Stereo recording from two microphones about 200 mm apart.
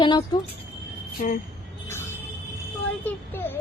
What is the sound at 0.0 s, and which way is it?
Speech, 20° left (ahead or behind).